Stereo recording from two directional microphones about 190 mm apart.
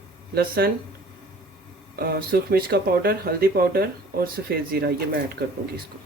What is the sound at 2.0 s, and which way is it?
Speech, 50° right (ahead or behind).